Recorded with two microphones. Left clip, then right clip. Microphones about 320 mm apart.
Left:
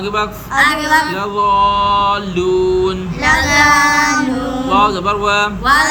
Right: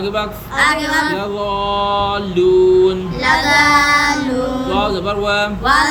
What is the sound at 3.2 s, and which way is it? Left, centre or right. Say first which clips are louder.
Music: left 1 dB; centre.